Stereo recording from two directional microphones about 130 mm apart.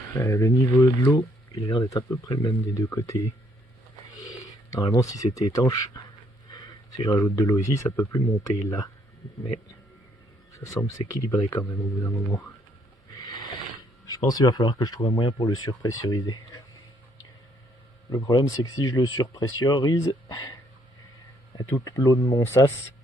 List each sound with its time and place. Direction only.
0.2 s speech: 20° left (ahead or behind)
4.2 s speech: 30° left (ahead or behind)
10.5 s speech: 25° left (ahead or behind)
13.1 s a sound: 30° left (ahead or behind)
14.1 s speech: 30° left (ahead or behind)
18.1 s speech: 30° left (ahead or behind)
21.8 s speech: 25° left (ahead or behind)